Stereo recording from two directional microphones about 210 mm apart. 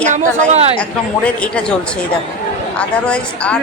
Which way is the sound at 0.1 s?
35° right (ahead or behind).